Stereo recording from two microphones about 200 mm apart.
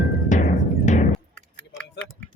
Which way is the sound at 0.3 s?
40° left (ahead or behind).